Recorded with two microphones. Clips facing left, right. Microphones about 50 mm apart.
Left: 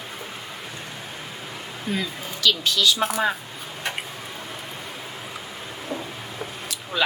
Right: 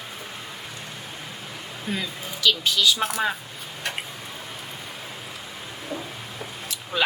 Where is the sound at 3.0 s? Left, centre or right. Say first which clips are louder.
Left 2 dB; centre.